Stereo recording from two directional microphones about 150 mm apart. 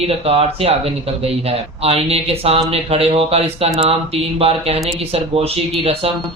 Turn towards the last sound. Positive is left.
turn(degrees=-40)  # may be behind; listen again after turning